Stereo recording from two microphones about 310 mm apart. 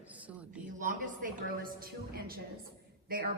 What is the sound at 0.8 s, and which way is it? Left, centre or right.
A woman's voice, right.